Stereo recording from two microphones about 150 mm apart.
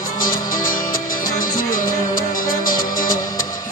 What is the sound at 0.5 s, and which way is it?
Music, 65° left (ahead or behind).